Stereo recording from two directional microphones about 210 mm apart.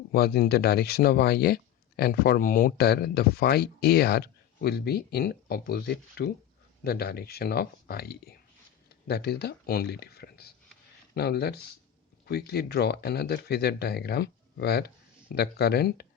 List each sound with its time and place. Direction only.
0.1 s speech: 45° left (ahead or behind)